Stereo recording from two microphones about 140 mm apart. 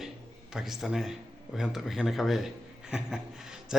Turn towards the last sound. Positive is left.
turn(degrees=-5)  # may be behind; listen again after turning